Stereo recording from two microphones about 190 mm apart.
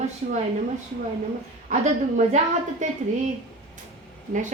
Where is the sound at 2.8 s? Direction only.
40° right (ahead or behind).